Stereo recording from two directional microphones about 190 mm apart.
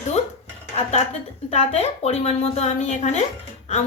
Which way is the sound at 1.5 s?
35° left (ahead or behind).